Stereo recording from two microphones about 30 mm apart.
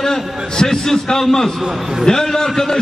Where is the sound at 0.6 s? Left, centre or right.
Centre.